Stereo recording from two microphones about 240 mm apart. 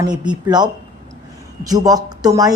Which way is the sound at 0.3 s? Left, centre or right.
Centre.